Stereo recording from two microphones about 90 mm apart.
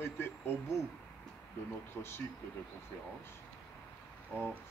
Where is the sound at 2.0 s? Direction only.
30° left (ahead or behind).